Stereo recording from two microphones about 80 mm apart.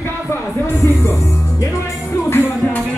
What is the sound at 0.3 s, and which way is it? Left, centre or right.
Music, left.